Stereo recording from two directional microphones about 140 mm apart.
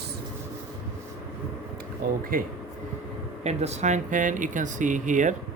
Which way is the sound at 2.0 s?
90° right.